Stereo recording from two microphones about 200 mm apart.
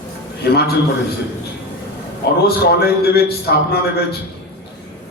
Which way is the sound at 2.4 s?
50° left (ahead or behind).